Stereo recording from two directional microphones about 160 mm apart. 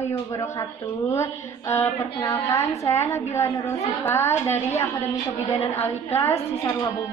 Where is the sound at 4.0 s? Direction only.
15° left (ahead or behind).